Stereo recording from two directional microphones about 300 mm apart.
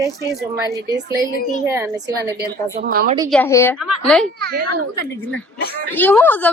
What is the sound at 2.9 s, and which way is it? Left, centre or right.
Speech, right.